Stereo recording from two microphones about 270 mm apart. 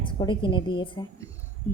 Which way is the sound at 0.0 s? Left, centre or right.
Centre.